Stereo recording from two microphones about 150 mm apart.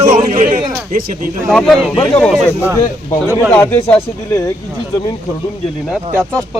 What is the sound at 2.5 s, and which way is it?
Speech, 15° right (ahead or behind).